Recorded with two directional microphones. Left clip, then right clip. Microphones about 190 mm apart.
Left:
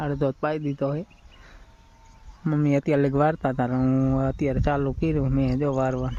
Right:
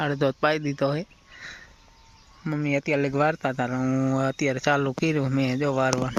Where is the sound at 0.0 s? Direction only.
Centre (ahead or behind).